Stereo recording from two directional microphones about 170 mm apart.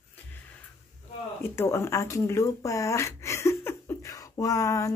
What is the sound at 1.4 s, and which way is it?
Speech, 15° left (ahead or behind).